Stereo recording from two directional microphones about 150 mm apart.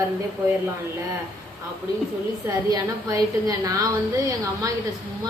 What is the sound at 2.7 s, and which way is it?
A woman's voice, 25° right (ahead or behind).